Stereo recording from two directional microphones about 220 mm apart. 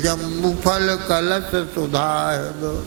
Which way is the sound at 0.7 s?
15° right (ahead or behind).